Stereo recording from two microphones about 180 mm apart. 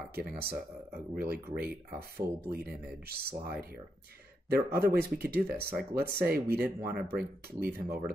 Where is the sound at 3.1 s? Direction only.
60° right (ahead or behind).